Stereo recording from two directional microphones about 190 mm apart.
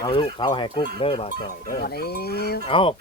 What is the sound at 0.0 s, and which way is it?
Speech, 25° left (ahead or behind).